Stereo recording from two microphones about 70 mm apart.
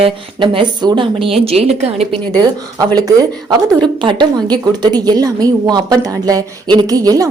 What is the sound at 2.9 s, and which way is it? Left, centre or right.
Speech, right.